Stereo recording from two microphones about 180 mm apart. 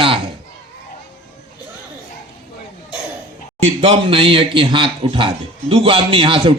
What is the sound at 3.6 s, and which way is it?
A man's voice, 30° right (ahead or behind).